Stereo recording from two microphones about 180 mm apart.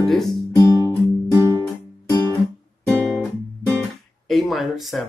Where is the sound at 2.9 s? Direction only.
Centre (ahead or behind).